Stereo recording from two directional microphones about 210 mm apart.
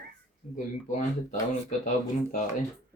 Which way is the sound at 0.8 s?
35° left (ahead or behind).